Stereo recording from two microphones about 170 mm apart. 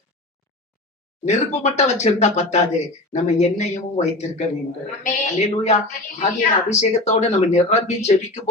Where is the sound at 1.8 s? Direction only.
40° left (ahead or behind).